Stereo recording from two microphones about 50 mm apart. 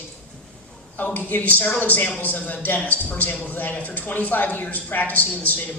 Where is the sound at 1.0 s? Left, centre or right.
Left.